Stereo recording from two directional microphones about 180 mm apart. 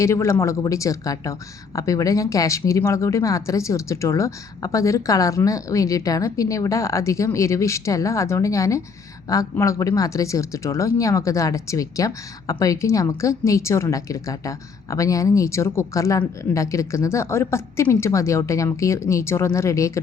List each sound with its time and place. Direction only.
0.0 s speech: 15° left (ahead or behind)